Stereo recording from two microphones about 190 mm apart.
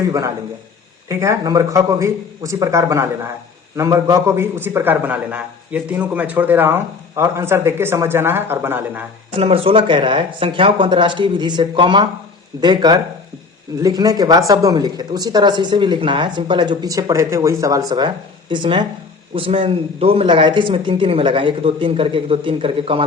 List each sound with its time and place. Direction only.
1.0 s a man's voice: 15° right (ahead or behind)
9.4 s speech: 30° right (ahead or behind)